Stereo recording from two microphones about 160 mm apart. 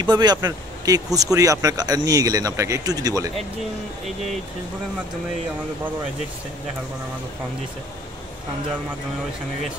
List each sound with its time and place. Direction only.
0.0 s speech: 25° right (ahead or behind)